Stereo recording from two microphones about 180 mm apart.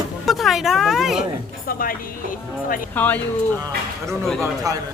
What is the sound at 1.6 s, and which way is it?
Speech, 55° left (ahead or behind).